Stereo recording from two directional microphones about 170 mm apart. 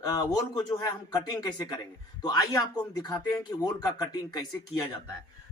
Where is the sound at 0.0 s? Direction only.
25° left (ahead or behind).